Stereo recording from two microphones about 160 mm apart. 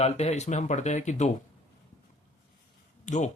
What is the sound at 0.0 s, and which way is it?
Speech, 45° left (ahead or behind).